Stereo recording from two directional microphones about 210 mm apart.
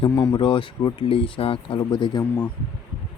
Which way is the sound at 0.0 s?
15° left (ahead or behind).